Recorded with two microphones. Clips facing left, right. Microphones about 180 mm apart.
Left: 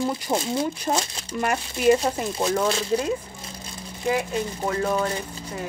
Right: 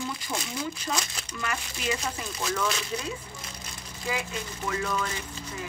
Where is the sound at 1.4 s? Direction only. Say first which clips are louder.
Left 9 dB; 55° left (ahead or behind).